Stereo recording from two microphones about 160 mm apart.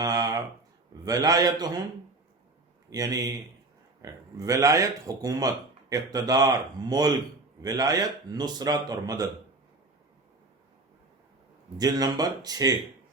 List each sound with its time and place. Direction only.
0.0 s a sound: 25° right (ahead or behind)
1.0 s speech: 25° right (ahead or behind)
2.9 s speech: 20° right (ahead or behind)
11.8 s speech: 25° right (ahead or behind)